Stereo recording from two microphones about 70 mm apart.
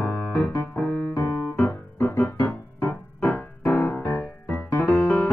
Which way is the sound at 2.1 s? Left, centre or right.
Left.